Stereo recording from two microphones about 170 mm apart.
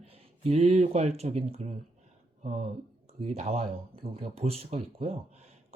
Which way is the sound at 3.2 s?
40° right (ahead or behind).